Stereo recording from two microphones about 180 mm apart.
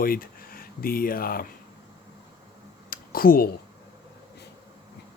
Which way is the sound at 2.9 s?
55° left (ahead or behind).